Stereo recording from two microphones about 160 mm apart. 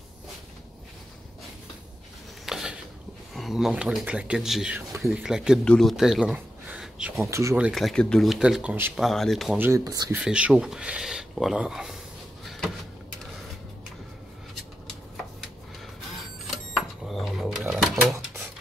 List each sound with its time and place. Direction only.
2.4 s a sound: 5° right (ahead or behind)
3.3 s speech: centre (ahead or behind)
4.7 s speech: 15° right (ahead or behind)
5.1 s speech: 5° right (ahead or behind)
7.2 s speech: 20° right (ahead or behind)
7.5 s speech: 5° right (ahead or behind)
8.9 s speech: centre (ahead or behind)
9.6 s speech: 20° right (ahead or behind)
10.1 s speech: 5° right (ahead or behind)
16.2 s cash register: centre (ahead or behind)